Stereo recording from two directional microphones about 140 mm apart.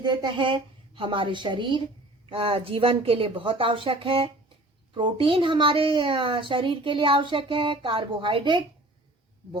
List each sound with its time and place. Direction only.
0.0 s speech: 35° right (ahead or behind)